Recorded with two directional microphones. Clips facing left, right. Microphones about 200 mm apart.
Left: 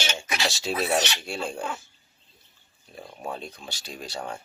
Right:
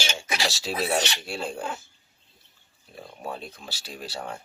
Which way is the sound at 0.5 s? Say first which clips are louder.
Left 2 dB; centre (ahead or behind).